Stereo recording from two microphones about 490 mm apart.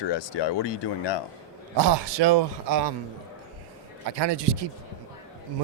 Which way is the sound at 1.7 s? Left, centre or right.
Right.